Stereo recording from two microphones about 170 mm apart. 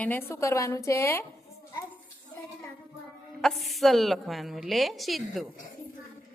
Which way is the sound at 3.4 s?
Centre (ahead or behind).